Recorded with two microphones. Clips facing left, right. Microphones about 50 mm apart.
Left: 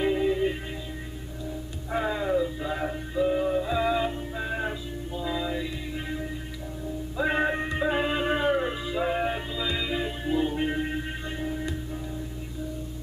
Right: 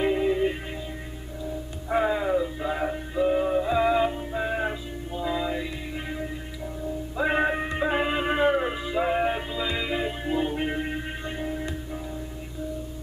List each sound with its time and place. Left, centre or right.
0.0 s music: centre
1.9 s music: centre